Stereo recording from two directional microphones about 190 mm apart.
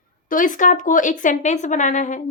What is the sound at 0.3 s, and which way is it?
Speech, 45° left (ahead or behind).